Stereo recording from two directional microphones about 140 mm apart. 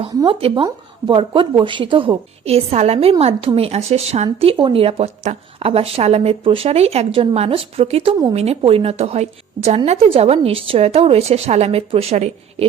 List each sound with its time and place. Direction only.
0.3 s a woman's voice: 40° right (ahead or behind)